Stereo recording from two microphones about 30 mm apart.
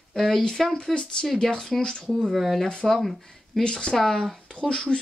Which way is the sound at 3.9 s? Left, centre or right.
Centre.